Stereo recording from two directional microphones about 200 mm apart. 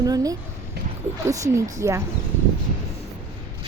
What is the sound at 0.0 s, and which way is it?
Speech, 15° right (ahead or behind).